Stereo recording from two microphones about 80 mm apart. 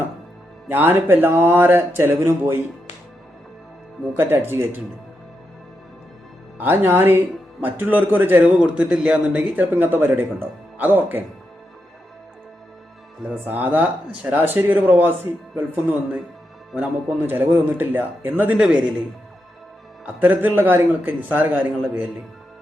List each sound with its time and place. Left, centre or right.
0.7 s speech: right
4.2 s speech: right
6.6 s speech: right
13.5 s speech: right
17.2 s speech: right
18.6 s speech: centre
20.2 s speech: right